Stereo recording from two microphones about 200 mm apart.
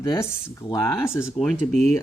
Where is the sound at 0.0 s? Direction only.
15° left (ahead or behind).